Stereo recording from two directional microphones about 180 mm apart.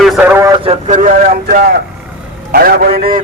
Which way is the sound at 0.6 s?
30° right (ahead or behind).